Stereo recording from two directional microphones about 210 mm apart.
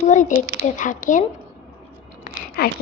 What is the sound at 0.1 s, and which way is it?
A child's voice, 35° left (ahead or behind).